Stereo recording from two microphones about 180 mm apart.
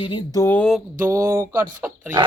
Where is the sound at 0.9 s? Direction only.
15° right (ahead or behind).